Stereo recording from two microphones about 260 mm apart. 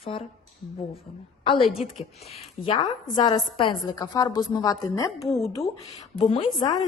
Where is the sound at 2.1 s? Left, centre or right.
Left.